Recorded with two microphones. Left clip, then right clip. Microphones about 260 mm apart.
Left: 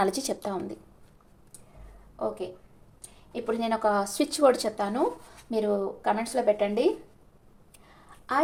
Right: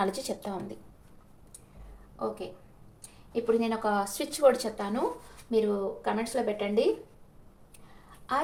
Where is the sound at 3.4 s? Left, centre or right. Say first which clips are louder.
Left 2 dB; left.